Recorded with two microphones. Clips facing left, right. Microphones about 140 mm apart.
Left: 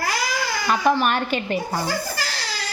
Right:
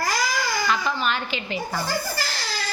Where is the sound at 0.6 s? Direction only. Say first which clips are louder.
Left 9 dB; 60° left (ahead or behind).